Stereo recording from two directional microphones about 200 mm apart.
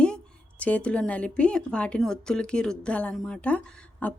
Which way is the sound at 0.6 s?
5° left (ahead or behind).